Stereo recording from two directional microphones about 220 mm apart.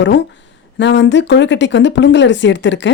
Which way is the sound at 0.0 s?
55° left (ahead or behind).